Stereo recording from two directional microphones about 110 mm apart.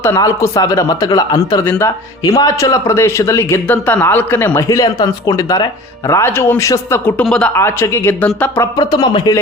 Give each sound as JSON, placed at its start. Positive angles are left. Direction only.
{"t": 0.2, "sound": "speech", "side_deg": 30}
{"t": 7.3, "sound": "speech", "side_deg": 5}
{"t": 7.5, "sound": "speech", "side_deg": 25}
{"t": 8.8, "sound": "speech", "side_deg": 40}